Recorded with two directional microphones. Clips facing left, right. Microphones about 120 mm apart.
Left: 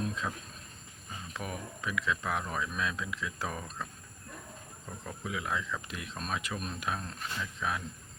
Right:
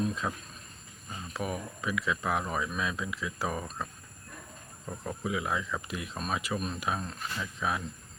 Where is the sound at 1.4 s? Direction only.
5° right (ahead or behind).